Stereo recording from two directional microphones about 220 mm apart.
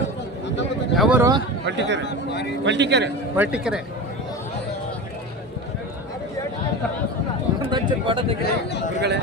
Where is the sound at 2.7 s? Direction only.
50° right (ahead or behind).